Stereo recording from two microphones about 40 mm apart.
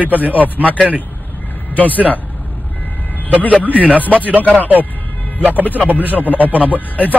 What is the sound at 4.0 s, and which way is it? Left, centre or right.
Speech, left.